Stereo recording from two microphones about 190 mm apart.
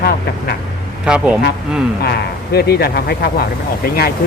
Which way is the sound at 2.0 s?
55° left (ahead or behind).